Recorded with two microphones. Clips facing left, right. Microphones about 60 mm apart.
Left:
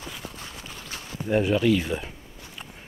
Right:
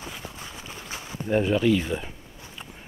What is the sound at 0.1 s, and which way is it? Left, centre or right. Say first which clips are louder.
Walk: even; centre.